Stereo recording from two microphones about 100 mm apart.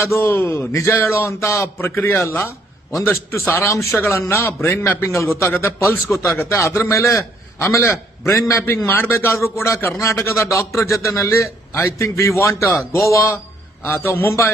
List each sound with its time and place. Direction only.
0.0 s a man's voice: 25° left (ahead or behind)